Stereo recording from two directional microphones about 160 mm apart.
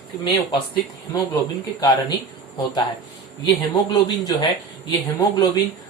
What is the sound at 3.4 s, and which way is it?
Speech, 30° left (ahead or behind).